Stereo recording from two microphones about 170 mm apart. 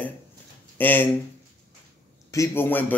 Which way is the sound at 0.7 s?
10° left (ahead or behind).